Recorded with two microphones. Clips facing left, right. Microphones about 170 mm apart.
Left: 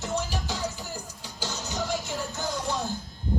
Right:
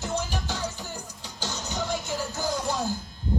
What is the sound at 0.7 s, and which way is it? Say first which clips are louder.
Music: even; 20° right (ahead or behind).